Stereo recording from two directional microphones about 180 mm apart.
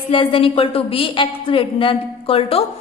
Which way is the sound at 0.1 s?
30° left (ahead or behind).